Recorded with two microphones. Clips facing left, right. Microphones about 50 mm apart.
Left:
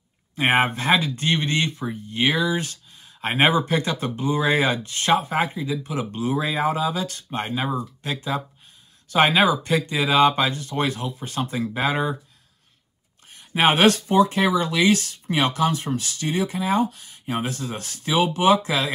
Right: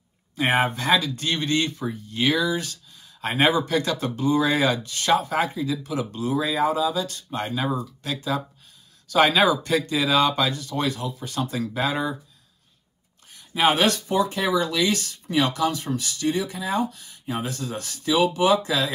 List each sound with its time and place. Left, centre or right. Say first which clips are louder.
0.4 s speech: left 2 dB; left
13.3 s speech: left 1 dB; left